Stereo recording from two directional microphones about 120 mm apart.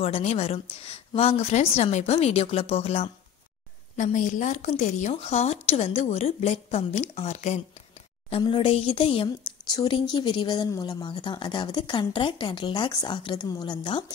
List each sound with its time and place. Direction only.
0.0 s a woman's voice: 60° left (ahead or behind)
3.9 s a woman's voice: 90° left; by 7.6 s 70° left (ahead or behind)
8.4 s speech: 45° left (ahead or behind)
9.7 s speech: 35° left (ahead or behind)